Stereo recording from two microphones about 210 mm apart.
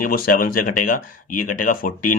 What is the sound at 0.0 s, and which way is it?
Speech, 40° left (ahead or behind).